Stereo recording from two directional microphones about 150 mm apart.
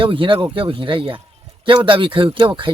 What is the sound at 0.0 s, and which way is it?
A man's voice, 35° right (ahead or behind).